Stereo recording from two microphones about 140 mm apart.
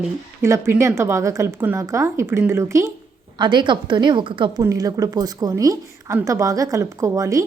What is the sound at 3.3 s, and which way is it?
A woman's voice, 35° right (ahead or behind).